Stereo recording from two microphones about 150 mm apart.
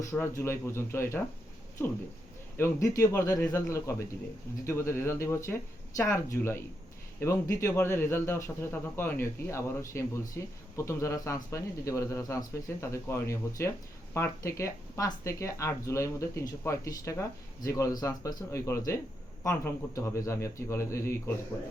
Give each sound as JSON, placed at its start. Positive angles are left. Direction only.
{"t": 0.0, "sound": "speech", "side_deg": 20}
{"t": 2.6, "sound": "a man's voice", "side_deg": 20}